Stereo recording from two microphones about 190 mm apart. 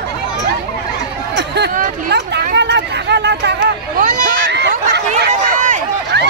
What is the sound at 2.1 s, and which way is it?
Speech, 65° right (ahead or behind).